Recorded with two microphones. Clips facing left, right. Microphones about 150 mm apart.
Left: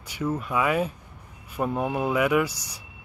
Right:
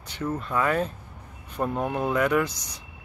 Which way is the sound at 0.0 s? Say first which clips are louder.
Left 2 dB; 10° left (ahead or behind).